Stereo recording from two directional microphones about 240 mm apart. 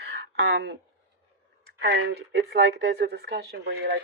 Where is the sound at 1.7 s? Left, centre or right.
Right.